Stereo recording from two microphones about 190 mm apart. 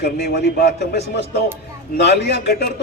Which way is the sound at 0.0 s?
60° left (ahead or behind).